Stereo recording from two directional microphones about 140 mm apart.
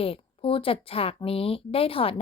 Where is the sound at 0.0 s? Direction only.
40° left (ahead or behind).